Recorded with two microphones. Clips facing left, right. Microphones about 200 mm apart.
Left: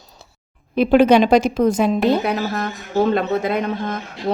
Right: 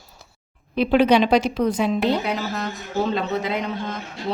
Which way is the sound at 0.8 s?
45° left (ahead or behind).